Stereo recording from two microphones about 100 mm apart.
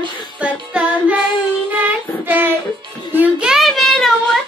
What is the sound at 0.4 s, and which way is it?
Music, 15° right (ahead or behind).